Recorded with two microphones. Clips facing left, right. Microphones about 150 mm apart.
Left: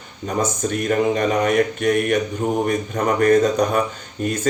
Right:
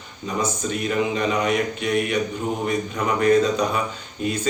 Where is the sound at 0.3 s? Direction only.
50° left (ahead or behind).